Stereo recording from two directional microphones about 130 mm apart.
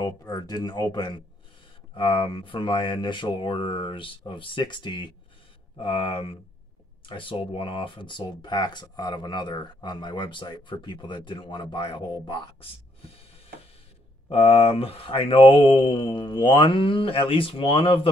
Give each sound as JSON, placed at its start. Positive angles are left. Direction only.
{"t": 0.0, "sound": "speech", "side_deg": 30}
{"t": 5.8, "sound": "mantra", "side_deg": 40}
{"t": 7.1, "sound": "speech", "side_deg": 40}
{"t": 14.3, "sound": "mantra", "side_deg": 50}